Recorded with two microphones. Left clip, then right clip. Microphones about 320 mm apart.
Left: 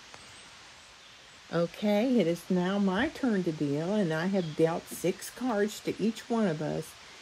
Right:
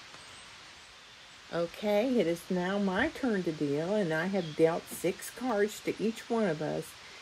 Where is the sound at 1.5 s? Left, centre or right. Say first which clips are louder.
Left 1 dB; left.